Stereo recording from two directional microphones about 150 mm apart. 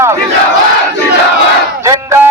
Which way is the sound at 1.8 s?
20° right (ahead or behind).